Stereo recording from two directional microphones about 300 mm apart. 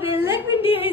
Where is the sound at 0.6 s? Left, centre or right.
Centre.